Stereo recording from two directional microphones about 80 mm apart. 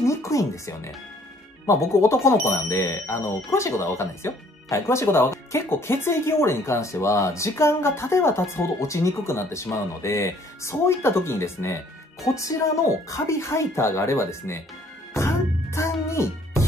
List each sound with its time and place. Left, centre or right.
0.0 s speech: left
15.1 s music: left